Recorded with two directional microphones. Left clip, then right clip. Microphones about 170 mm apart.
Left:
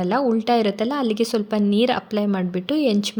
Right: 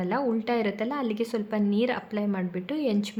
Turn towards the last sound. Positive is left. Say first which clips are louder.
# left 8 dB
turn(degrees=30)  # may be behind; listen again after turning